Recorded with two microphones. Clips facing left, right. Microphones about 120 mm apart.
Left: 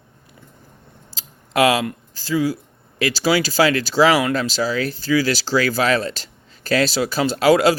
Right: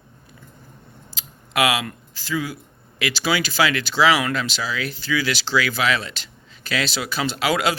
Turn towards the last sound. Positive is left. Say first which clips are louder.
# left 7 dB
turn(degrees=35)  # may be behind; listen again after turning